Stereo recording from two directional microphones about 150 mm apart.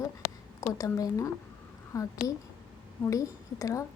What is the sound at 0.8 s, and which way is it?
A woman's voice, 20° left (ahead or behind).